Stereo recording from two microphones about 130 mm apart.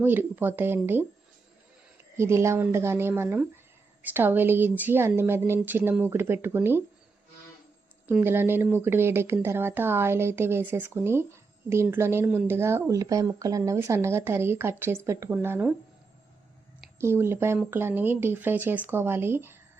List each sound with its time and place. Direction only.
0.0 s speech: 15° right (ahead or behind)
2.1 s speech: 20° right (ahead or behind)
8.2 s speech: 15° right (ahead or behind)
17.0 s speech: 20° right (ahead or behind)